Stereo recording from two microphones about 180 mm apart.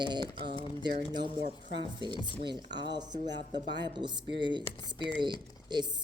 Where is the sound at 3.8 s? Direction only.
25° right (ahead or behind).